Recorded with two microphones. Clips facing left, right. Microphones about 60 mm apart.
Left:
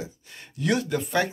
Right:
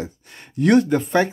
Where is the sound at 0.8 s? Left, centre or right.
Right.